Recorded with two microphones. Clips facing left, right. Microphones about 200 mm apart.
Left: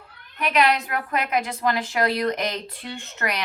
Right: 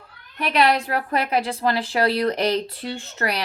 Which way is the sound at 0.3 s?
35° right (ahead or behind).